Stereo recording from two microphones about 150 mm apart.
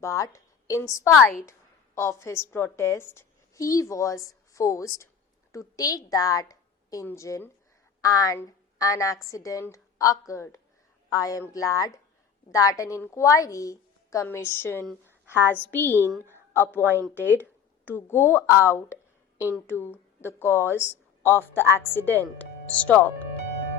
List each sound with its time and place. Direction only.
0.0 s a woman's voice: 20° left (ahead or behind)
15.4 s a woman's voice: 10° right (ahead or behind)
15.7 s a woman's voice: 15° left (ahead or behind)
16.8 s a woman's voice: 15° right (ahead or behind)
17.9 s speech: 15° left (ahead or behind)